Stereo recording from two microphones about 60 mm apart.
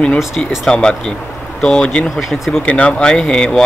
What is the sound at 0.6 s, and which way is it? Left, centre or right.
Speech, centre.